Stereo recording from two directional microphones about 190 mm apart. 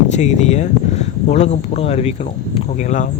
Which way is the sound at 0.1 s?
40° left (ahead or behind).